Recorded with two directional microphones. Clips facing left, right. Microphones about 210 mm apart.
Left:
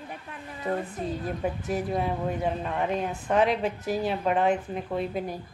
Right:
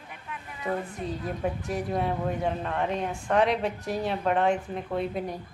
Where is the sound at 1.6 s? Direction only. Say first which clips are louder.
Left 2 dB; 5° left (ahead or behind).